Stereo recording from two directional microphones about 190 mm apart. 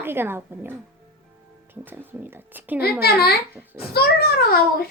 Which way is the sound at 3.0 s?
55° left (ahead or behind).